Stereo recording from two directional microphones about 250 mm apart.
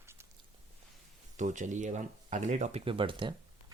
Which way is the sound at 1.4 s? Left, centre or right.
Right.